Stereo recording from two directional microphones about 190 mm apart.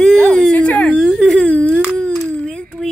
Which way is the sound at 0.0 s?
5° left (ahead or behind).